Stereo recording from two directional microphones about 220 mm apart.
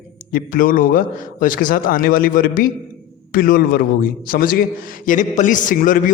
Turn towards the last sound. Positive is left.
turn(degrees=40)  # may be behind; listen again after turning